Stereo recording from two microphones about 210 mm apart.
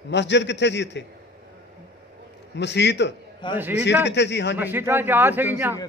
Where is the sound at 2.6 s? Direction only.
55° left (ahead or behind).